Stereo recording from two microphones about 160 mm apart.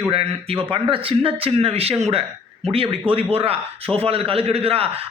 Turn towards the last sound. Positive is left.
turn(degrees=-35)  # may be behind; listen again after turning